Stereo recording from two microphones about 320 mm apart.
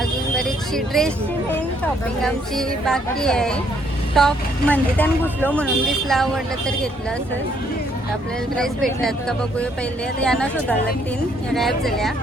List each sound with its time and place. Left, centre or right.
0.0 s a sound: centre
2.2 s speech: centre
8.6 s speech: centre
10.2 s speech: centre